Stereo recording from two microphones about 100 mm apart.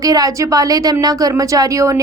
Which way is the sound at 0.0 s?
35° right (ahead or behind).